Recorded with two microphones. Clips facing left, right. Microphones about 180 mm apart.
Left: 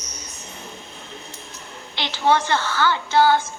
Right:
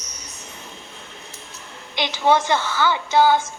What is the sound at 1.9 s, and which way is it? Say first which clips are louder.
A woman's voice: right 1 dB; 15° right (ahead or behind).